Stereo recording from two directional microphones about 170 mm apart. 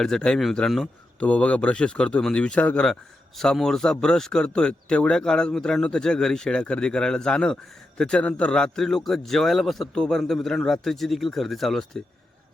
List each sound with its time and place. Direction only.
0.0 s a man's voice: 5° left (ahead or behind)